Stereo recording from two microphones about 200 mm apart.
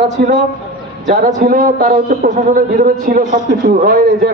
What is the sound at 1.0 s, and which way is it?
A man's voice, 45° right (ahead or behind).